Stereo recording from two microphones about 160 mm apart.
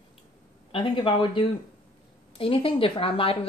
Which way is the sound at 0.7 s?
35° left (ahead or behind).